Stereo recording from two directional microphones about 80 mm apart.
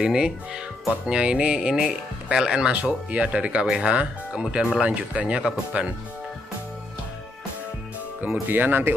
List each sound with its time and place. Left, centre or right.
0.0 s speech: centre
8.2 s speech: right